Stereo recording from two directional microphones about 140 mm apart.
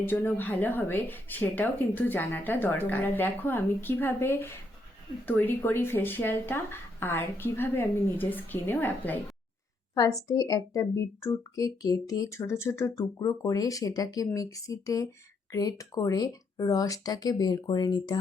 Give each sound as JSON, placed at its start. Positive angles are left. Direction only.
{"t": 0.0, "sound": "speech", "side_deg": 15}
{"t": 9.9, "sound": "a woman's voice", "side_deg": 25}